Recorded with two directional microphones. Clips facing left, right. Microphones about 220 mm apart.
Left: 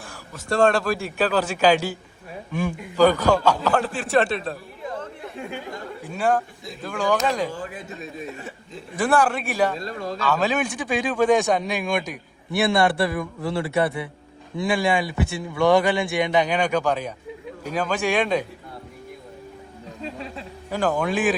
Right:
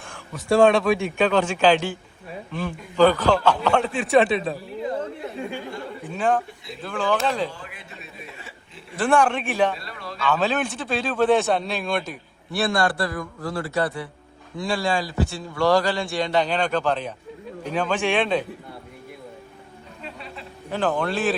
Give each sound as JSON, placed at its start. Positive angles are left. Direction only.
{"t": 0.0, "sound": "a man's voice", "side_deg": 0}
{"t": 6.0, "sound": "a man's voice", "side_deg": 10}
{"t": 7.9, "sound": "speech", "side_deg": 45}
{"t": 9.0, "sound": "a man's voice", "side_deg": 5}
{"t": 9.7, "sound": "speech", "side_deg": 45}
{"t": 10.2, "sound": "a man's voice", "side_deg": 10}
{"t": 20.7, "sound": "a man's voice", "side_deg": 10}